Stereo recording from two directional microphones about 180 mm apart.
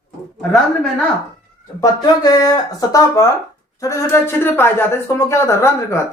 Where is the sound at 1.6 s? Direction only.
20° left (ahead or behind).